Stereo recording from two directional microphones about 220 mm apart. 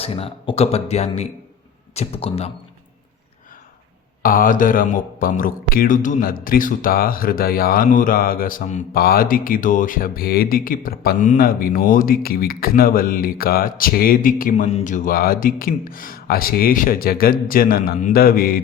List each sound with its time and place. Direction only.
0.0 s speech: 25° left (ahead or behind)
4.2 s speech: 40° left (ahead or behind)